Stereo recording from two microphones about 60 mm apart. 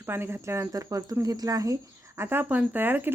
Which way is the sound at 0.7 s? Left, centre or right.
Right.